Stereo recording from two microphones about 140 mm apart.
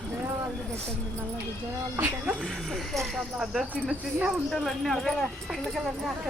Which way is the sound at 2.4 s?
5° left (ahead or behind).